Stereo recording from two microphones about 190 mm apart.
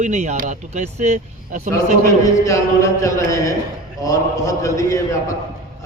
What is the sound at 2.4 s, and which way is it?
A man's voice, 15° left (ahead or behind).